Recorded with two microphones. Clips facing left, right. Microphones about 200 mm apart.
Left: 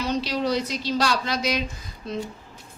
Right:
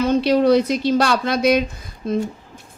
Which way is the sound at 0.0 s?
55° right (ahead or behind).